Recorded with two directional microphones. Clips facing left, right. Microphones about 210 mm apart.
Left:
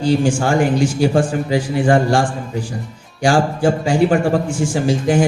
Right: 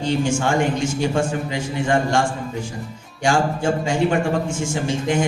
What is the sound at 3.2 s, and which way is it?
Speech, 35° left (ahead or behind).